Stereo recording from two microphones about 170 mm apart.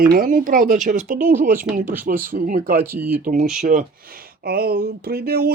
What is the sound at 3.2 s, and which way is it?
Speech, 50° right (ahead or behind).